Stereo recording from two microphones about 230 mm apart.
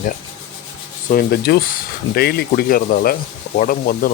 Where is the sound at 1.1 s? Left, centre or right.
Left.